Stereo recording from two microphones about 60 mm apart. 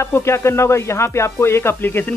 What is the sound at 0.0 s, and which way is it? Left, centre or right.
Speech, left.